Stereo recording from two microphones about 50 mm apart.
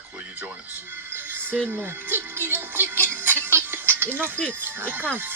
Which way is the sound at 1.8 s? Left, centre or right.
Right.